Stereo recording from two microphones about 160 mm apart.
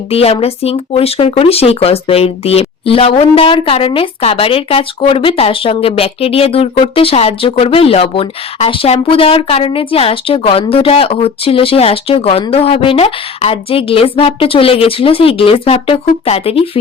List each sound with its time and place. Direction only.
0.1 s speech: 40° left (ahead or behind)